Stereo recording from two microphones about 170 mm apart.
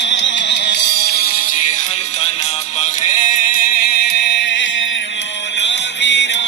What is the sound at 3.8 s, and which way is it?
Music, 80° left.